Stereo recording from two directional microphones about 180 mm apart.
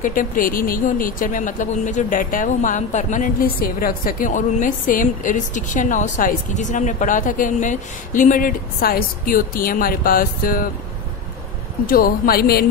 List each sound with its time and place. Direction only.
0.0 s speech: 50° left (ahead or behind)
11.8 s speech: 55° left (ahead or behind)